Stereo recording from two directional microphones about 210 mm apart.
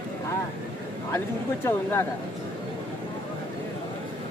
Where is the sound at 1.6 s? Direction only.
10° left (ahead or behind).